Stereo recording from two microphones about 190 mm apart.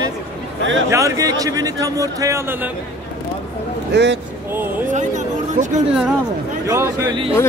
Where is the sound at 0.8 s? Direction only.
15° right (ahead or behind).